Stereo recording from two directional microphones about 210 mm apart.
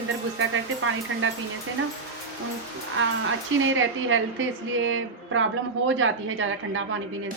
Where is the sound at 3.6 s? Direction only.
70° right (ahead or behind).